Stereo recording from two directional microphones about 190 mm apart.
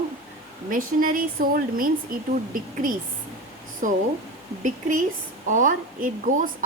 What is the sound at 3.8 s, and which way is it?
A woman's voice, 45° right (ahead or behind).